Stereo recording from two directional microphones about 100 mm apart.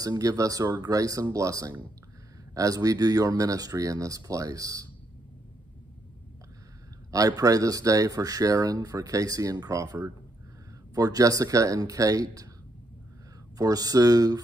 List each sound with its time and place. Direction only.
0.0 s speech: 35° right (ahead or behind)
7.1 s speech: 35° right (ahead or behind)
13.6 s speech: 40° right (ahead or behind)